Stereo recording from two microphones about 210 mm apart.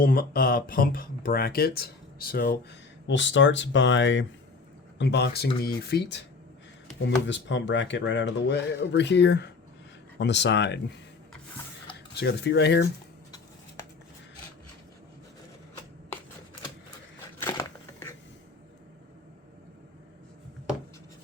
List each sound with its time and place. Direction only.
0.0 s speech: 45° left (ahead or behind)
3.1 s speech: 60° left (ahead or behind)
12.1 s speech: 55° left (ahead or behind)
17.4 s crushing: 10° left (ahead or behind)